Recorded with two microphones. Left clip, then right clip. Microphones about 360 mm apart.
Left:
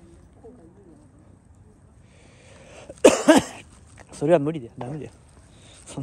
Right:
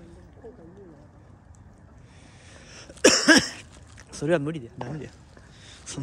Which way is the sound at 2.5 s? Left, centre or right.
Centre.